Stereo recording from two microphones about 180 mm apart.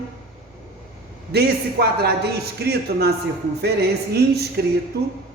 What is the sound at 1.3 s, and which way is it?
A man's voice, 65° right (ahead or behind).